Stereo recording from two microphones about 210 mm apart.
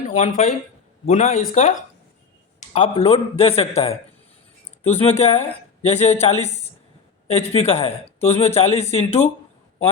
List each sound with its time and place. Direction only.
0.1 s speech: 35° left (ahead or behind)
2.6 s a sound: 35° left (ahead or behind)
3.0 s speech: 30° left (ahead or behind)